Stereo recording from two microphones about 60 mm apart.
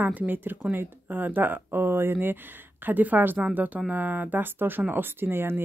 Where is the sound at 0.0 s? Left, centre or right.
Right.